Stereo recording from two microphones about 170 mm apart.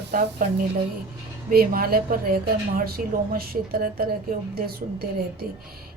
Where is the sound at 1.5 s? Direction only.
60° right (ahead or behind).